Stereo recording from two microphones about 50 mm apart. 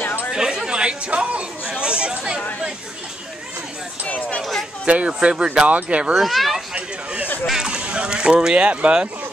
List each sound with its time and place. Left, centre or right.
0.0 s chatter: left
0.3 s chatter: centre
4.4 s speech: centre
4.8 s speech: right
6.1 s speech: centre
6.7 s a sound: right
7.6 s speech: centre